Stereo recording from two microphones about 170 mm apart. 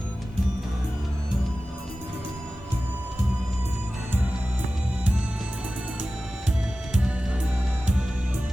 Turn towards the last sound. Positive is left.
turn(degrees=-5)  # may be behind; listen again after turning